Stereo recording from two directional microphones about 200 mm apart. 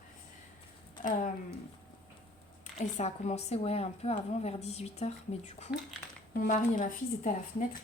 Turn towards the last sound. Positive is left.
turn(degrees=40)  # may be behind; listen again after turning